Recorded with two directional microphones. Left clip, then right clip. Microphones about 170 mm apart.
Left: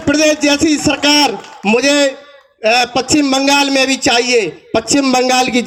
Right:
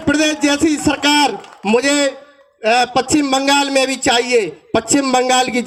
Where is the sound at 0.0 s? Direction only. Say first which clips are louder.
Left 3 dB; 35° left (ahead or behind).